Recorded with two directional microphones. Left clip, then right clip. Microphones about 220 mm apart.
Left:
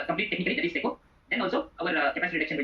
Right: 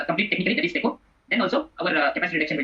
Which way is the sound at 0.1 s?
55° right (ahead or behind).